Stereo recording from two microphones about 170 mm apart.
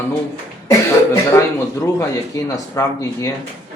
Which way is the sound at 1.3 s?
15° left (ahead or behind).